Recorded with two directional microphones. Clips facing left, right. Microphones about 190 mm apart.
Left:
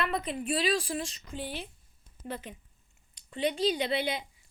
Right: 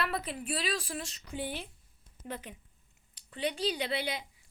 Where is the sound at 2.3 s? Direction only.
10° right (ahead or behind).